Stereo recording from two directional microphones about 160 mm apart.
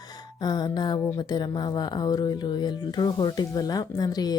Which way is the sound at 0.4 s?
25° left (ahead or behind).